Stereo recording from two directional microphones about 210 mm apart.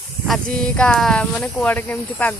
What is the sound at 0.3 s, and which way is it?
Speech, 5° left (ahead or behind).